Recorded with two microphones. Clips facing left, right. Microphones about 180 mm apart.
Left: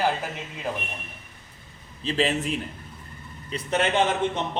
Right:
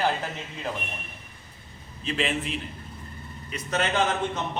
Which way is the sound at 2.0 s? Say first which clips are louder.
Left 3 dB; 35° left (ahead or behind).